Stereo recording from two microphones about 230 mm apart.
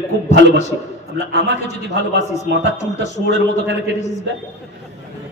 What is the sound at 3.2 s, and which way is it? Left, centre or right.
Speech, right.